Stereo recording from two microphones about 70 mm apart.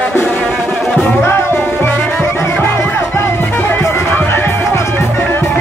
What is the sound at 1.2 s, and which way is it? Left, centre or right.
Music, left.